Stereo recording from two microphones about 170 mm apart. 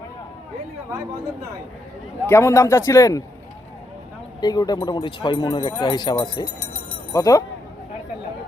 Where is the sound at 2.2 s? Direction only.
15° left (ahead or behind).